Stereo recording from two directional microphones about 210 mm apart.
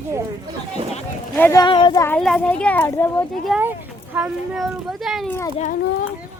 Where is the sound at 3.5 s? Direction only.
10° right (ahead or behind).